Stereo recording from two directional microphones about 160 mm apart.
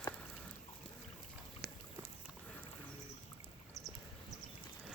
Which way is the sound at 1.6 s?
80° right.